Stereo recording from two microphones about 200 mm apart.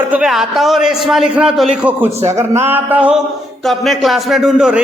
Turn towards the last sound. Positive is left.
turn(degrees=-5)  # may be behind; listen again after turning